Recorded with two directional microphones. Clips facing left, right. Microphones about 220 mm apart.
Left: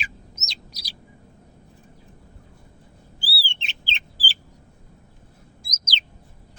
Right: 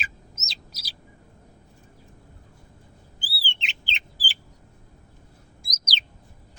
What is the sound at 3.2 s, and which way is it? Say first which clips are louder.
Bird: left 1 dB; 20° right (ahead or behind).